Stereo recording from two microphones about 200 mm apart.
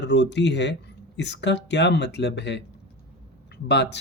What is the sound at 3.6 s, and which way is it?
Speech, 60° left (ahead or behind).